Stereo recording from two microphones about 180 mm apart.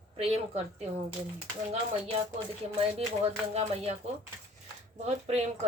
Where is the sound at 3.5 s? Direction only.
35° right (ahead or behind).